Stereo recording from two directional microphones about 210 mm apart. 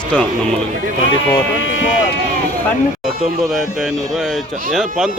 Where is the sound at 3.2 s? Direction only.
Centre (ahead or behind).